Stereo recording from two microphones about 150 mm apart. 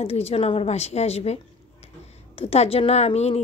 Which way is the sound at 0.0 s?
40° left (ahead or behind).